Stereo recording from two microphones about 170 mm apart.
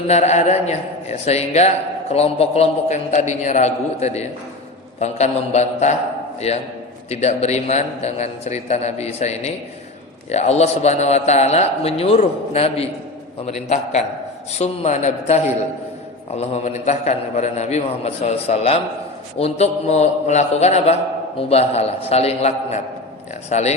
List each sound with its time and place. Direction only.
0.1 s a man's voice: 40° left (ahead or behind)